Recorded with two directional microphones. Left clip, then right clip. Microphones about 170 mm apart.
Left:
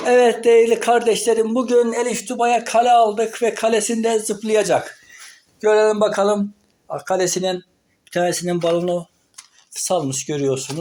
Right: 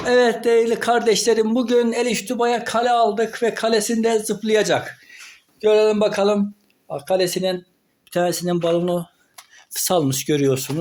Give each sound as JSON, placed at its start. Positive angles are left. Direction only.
{"t": 0.0, "sound": "speech", "side_deg": -10}
{"t": 2.4, "sound": "speech", "side_deg": -5}
{"t": 9.7, "sound": "speech", "side_deg": -50}